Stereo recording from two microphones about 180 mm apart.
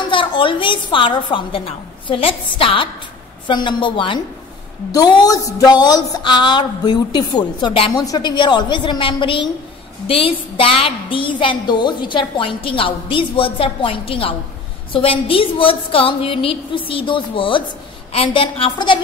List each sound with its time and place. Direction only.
0.1 s a woman's voice: 30° left (ahead or behind)